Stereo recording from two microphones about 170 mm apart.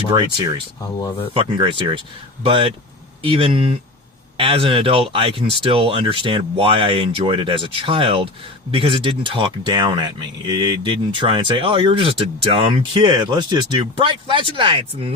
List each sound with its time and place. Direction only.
0.1 s speech: 30° right (ahead or behind)